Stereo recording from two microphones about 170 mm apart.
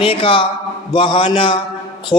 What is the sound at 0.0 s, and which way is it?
Mantra, 30° left (ahead or behind).